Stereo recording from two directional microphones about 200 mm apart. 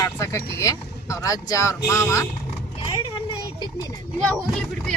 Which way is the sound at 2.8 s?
25° left (ahead or behind).